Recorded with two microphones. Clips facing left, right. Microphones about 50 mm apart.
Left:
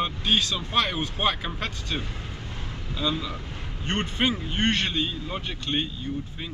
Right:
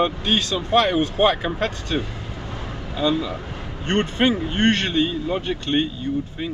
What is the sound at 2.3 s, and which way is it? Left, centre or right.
Vehicle, right.